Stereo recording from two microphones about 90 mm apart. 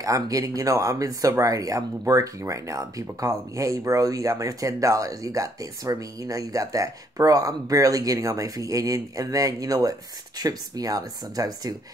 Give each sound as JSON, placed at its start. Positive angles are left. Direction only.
{"t": 0.0, "sound": "speech", "side_deg": -40}